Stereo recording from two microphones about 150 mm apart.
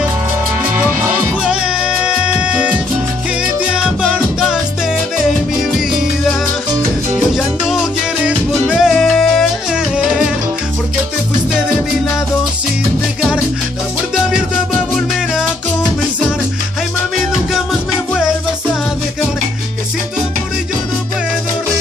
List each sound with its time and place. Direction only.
1.4 s music: 5° right (ahead or behind)
7.3 s music: 5° right (ahead or behind)